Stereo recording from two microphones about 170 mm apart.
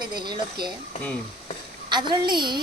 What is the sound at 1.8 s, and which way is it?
Speech, 25° right (ahead or behind).